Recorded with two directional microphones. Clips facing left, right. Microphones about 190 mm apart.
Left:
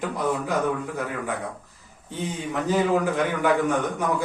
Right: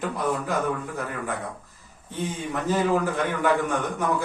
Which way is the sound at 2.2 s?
15° left (ahead or behind).